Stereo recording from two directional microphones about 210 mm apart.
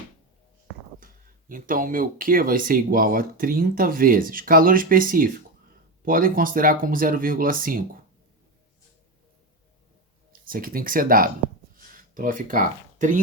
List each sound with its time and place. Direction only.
1.5 s speech: 40° right (ahead or behind)
10.4 s speech: 40° right (ahead or behind)